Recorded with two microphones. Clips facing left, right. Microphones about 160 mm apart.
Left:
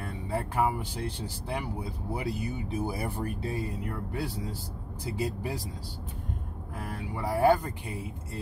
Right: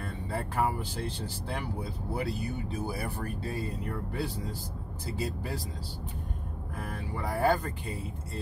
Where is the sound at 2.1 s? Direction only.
20° left (ahead or behind).